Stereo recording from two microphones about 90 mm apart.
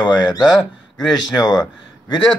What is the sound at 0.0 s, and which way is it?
Speech, 55° left (ahead or behind).